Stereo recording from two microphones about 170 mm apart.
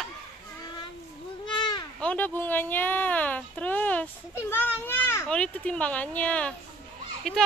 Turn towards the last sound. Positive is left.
turn(degrees=5)  # may be behind; listen again after turning